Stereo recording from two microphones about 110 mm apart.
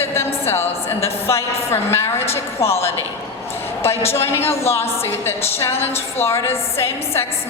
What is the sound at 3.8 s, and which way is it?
A woman's voice, 20° left (ahead or behind).